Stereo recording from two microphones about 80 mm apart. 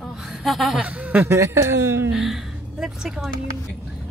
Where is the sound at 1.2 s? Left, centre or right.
Right.